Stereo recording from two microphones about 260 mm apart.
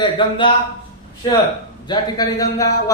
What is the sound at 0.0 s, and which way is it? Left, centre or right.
Speech, centre.